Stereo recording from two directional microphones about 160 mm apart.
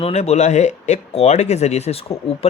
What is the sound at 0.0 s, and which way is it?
Speech, 40° left (ahead or behind).